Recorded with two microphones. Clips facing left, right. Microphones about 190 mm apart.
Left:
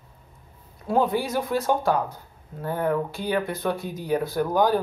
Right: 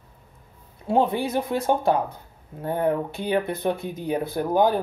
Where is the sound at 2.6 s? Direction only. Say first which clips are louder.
Right 1 dB; 25° right (ahead or behind).